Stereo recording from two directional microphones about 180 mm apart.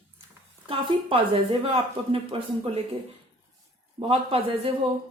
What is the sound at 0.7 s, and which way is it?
Speech, 30° right (ahead or behind).